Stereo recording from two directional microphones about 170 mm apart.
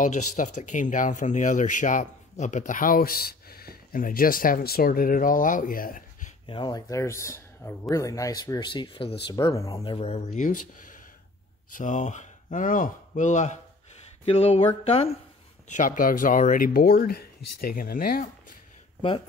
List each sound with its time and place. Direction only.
0.0 s speech: 45° left (ahead or behind)
6.4 s speech: 30° left (ahead or behind)
9.9 s speech: 35° left (ahead or behind)
15.7 s speech: 50° left (ahead or behind)
18.9 s speech: 30° left (ahead or behind)